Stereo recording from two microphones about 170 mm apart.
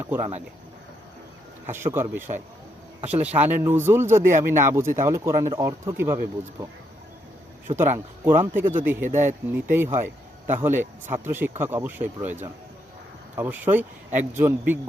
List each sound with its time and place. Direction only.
0.0 s speech: 15° right (ahead or behind)
1.6 s speech: 15° right (ahead or behind)
3.2 s speech: 10° right (ahead or behind)
7.8 s speech: 15° right (ahead or behind)
9.0 s speech: 45° right (ahead or behind)
9.5 s speech: 10° right (ahead or behind)
13.3 s speech: 10° right (ahead or behind)